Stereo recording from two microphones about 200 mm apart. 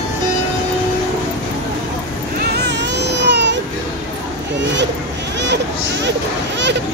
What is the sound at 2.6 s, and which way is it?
Baby cry, 60° right (ahead or behind).